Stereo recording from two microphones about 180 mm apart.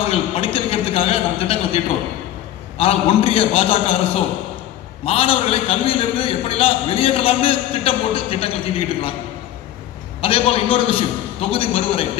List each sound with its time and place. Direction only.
0.1 s a sound: 30° left (ahead or behind)
2.8 s a man's voice: 35° left (ahead or behind)
10.2 s a man's voice: 30° left (ahead or behind)